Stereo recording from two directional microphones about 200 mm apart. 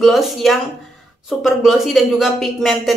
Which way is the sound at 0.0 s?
Centre (ahead or behind).